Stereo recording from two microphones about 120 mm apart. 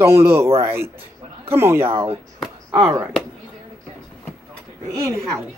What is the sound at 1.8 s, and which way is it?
Speech, 50° right (ahead or behind).